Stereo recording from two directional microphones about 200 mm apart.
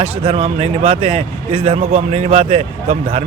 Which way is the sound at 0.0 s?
25° right (ahead or behind).